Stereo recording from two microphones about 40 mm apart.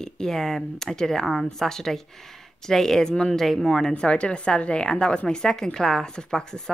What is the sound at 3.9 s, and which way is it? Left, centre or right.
Speech, left.